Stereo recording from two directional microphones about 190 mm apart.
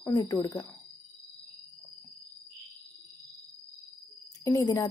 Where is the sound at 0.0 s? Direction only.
15° left (ahead or behind).